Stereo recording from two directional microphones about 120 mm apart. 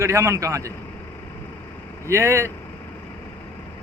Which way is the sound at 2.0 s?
25° right (ahead or behind).